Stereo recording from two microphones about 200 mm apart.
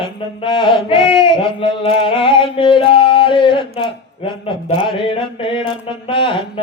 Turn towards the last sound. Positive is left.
turn(degrees=25)  # may be behind; listen again after turning